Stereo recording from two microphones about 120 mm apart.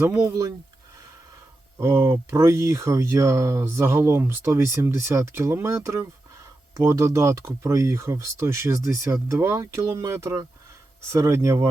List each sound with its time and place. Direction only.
0.1 s speech: 30° right (ahead or behind)
1.8 s speech: 25° right (ahead or behind)